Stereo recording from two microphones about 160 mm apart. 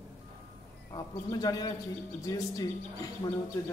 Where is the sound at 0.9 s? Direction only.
25° left (ahead or behind).